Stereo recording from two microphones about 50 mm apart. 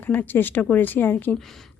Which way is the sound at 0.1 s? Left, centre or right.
Left.